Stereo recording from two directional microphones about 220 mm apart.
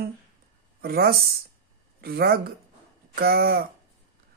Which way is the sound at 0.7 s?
45° right (ahead or behind).